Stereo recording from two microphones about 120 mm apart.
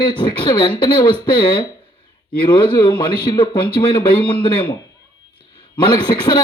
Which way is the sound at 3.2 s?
40° left (ahead or behind).